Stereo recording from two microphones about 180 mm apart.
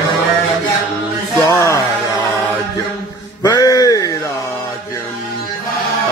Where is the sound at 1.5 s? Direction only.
15° left (ahead or behind).